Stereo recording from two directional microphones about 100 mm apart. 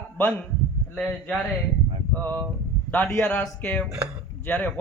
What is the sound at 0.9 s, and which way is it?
A man's voice, 5° left (ahead or behind).